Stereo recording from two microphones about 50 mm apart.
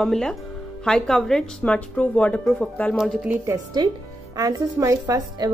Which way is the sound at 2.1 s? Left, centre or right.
Left.